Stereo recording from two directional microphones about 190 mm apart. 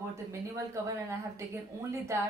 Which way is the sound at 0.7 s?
15° right (ahead or behind).